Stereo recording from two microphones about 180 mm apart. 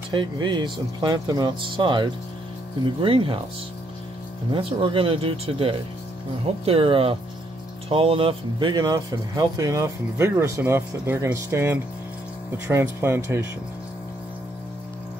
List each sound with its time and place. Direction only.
0.1 s speech: 25° right (ahead or behind)
4.5 s speech: 30° right (ahead or behind)